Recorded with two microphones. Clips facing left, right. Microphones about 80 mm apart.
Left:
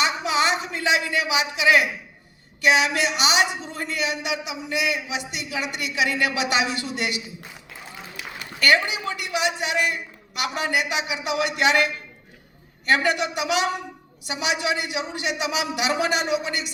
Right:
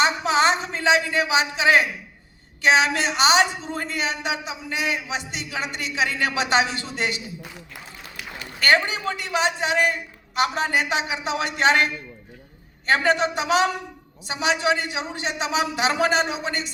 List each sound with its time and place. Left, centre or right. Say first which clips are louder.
0.0 s a sound: right 3 dB; right
2.6 s speech: right 1 dB; right
8.6 s speech: right 1 dB; right
12.9 s speech: right 1 dB; right